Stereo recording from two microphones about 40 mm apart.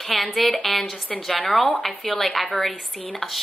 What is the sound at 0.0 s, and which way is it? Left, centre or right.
A woman's voice, centre.